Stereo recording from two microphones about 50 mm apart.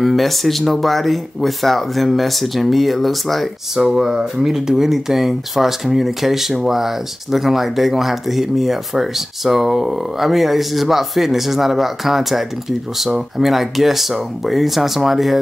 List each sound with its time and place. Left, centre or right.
0.0 s speech: centre
3.8 s speech: centre